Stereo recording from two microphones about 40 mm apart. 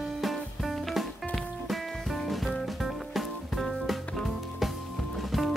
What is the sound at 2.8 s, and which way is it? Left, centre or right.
Music, centre.